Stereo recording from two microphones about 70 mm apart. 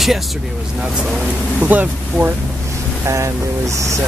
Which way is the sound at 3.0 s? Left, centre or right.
Right.